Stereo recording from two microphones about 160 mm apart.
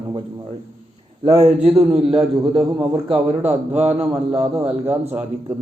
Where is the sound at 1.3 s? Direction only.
35° right (ahead or behind).